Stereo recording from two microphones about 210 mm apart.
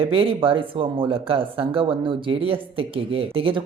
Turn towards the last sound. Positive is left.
turn(degrees=-25)  # may be behind; listen again after turning